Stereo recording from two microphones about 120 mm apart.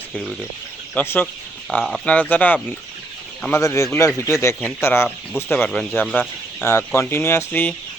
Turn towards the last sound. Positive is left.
turn(degrees=15)  # may be behind; listen again after turning